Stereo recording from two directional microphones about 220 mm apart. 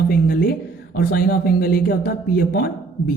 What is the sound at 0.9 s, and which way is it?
Speech, 45° left (ahead or behind).